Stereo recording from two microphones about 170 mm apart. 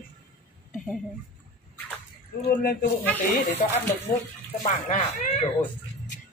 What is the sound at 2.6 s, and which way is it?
Speech, 60° left (ahead or behind).